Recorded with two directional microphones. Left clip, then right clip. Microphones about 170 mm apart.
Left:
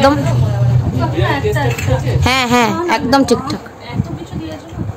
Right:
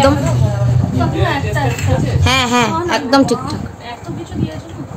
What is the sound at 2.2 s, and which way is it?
A woman's voice, 25° left (ahead or behind).